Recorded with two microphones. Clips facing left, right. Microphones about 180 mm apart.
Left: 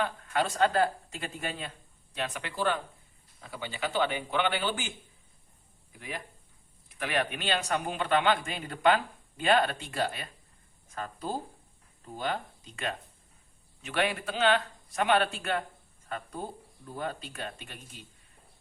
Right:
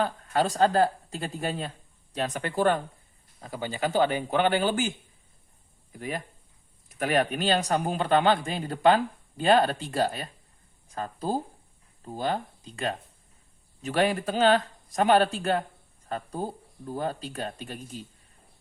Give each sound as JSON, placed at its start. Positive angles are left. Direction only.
{"t": 0.0, "sound": "a man's voice", "side_deg": -35}